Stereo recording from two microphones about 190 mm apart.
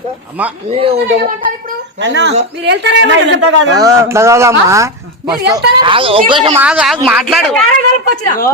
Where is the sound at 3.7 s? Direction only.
15° right (ahead or behind).